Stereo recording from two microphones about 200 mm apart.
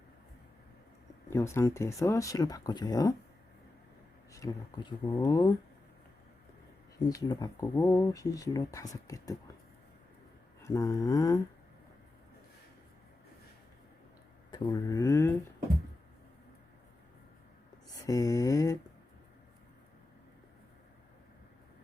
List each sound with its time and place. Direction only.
1.3 s speech: 15° left (ahead or behind)
4.3 s speech: 15° left (ahead or behind)
7.0 s speech: 20° left (ahead or behind)
10.6 s speech: 15° left (ahead or behind)
14.5 s speech: 20° left (ahead or behind)
18.0 s speech: 15° left (ahead or behind)